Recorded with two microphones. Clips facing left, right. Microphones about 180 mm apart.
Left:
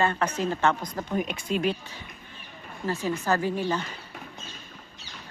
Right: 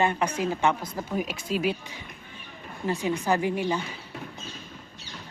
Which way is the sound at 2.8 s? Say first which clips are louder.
Right 1 dB; 15° right (ahead or behind).